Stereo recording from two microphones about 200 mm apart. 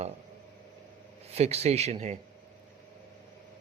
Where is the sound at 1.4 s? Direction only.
30° right (ahead or behind).